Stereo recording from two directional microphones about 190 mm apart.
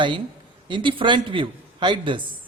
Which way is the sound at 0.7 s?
25° right (ahead or behind).